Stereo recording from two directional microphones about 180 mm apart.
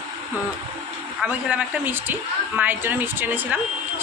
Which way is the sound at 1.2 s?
5° right (ahead or behind).